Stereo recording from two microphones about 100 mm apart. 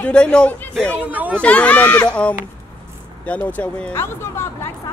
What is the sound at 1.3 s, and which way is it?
Speech, 15° left (ahead or behind).